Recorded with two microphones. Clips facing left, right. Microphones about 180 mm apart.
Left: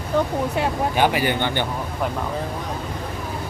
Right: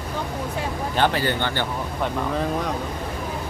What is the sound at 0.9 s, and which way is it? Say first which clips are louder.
Speech: right 1 dB; 10° left (ahead or behind).